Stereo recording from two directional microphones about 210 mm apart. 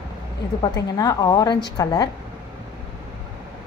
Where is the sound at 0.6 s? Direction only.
20° left (ahead or behind).